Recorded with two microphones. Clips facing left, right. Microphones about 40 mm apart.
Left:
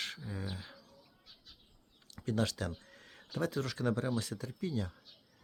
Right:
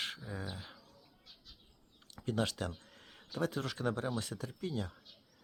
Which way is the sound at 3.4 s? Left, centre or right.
Right.